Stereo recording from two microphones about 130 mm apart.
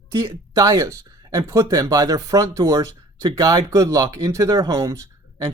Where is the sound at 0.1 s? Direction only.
30° right (ahead or behind).